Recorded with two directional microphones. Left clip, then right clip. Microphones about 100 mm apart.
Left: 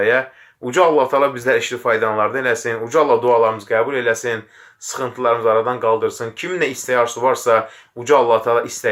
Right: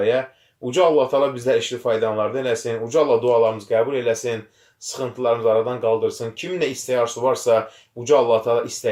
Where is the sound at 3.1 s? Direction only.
35° left (ahead or behind).